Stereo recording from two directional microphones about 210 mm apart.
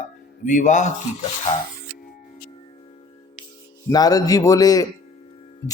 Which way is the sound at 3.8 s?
15° left (ahead or behind).